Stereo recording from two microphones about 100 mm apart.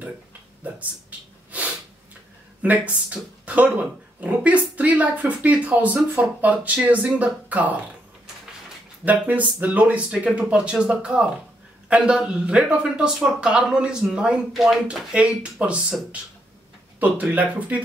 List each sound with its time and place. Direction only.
2.6 s speech: 15° right (ahead or behind)
9.0 s speech: 15° right (ahead or behind)